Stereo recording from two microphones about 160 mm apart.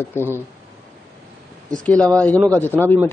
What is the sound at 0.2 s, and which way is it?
Speech, 15° left (ahead or behind).